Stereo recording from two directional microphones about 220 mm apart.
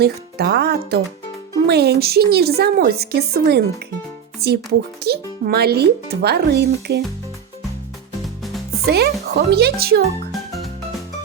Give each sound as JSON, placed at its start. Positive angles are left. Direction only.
{"t": 0.0, "sound": "a woman's voice", "side_deg": -45}
{"t": 8.9, "sound": "a woman's voice", "side_deg": -45}